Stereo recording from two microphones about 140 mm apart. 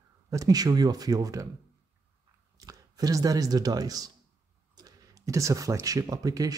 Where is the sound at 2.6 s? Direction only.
25° right (ahead or behind).